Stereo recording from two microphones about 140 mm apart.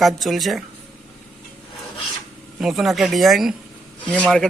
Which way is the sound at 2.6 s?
Centre (ahead or behind).